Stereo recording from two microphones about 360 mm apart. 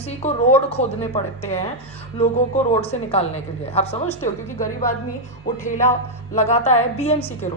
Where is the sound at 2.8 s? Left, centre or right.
Centre.